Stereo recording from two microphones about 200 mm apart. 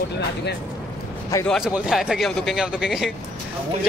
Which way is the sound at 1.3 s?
5° left (ahead or behind).